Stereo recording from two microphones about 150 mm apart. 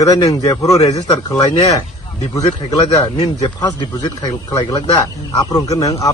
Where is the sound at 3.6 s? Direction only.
30° left (ahead or behind).